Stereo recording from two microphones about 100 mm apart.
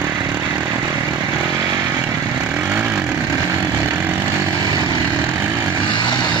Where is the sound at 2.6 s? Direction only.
15° right (ahead or behind).